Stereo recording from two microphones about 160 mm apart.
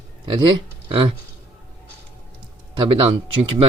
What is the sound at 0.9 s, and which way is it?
Speech, 35° right (ahead or behind).